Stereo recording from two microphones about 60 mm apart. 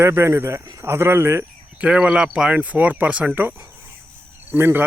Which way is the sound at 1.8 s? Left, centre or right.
Centre.